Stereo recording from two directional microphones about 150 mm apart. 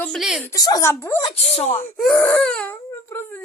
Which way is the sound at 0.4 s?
25° left (ahead or behind).